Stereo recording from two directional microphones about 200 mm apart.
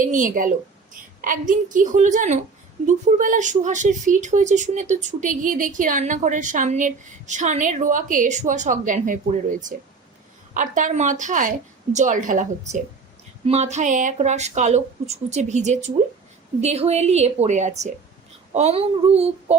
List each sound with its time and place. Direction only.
0.0 s speech: 40° right (ahead or behind)